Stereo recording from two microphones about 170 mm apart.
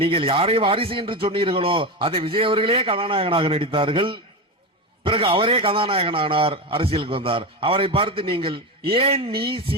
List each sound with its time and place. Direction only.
0.0 s speech: 30° right (ahead or behind)